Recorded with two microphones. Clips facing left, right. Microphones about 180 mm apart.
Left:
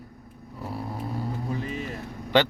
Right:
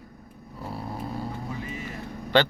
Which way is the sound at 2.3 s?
20° left (ahead or behind).